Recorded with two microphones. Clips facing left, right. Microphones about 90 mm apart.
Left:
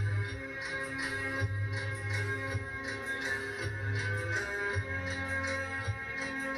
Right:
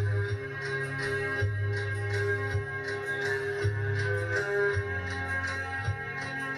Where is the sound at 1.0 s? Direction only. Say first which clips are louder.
Right 6 dB; 20° right (ahead or behind).